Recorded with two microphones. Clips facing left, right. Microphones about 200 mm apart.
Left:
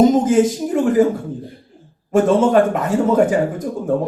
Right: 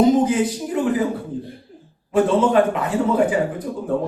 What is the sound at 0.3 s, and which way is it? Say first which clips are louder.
Speech: left 6 dB; 45° left (ahead or behind).